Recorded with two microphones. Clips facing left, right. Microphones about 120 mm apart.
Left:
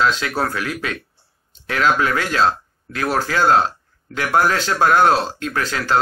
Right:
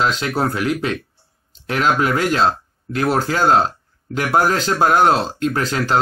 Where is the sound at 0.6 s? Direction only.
25° right (ahead or behind).